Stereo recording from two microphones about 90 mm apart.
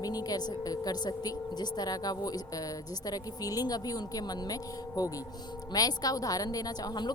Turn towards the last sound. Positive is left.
turn(degrees=50)  # may be behind; listen again after turning